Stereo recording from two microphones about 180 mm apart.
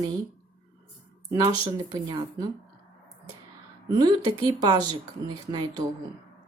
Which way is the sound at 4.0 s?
25° right (ahead or behind).